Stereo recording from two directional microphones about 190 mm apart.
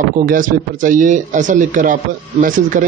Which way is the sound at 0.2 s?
45° right (ahead or behind).